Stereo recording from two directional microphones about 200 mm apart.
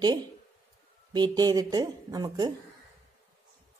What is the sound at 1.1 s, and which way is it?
Speech, 20° right (ahead or behind).